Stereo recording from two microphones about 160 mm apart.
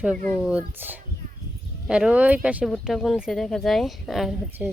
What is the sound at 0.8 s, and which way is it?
Speech, 10° right (ahead or behind).